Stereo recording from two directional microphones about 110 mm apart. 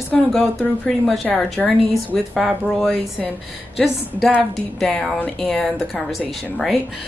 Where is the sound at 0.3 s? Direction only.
5° left (ahead or behind).